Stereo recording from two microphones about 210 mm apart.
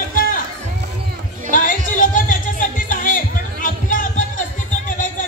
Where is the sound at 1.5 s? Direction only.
40° left (ahead or behind).